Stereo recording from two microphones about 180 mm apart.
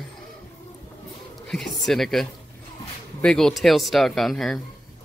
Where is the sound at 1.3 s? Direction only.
Centre (ahead or behind).